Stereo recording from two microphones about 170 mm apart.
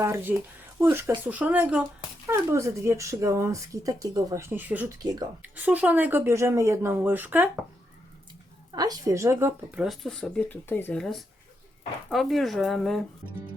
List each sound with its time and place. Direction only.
0.0 s speech: 15° right (ahead or behind)
8.7 s speech: 25° right (ahead or behind)
9.8 s speech: centre (ahead or behind)
12.1 s speech: centre (ahead or behind)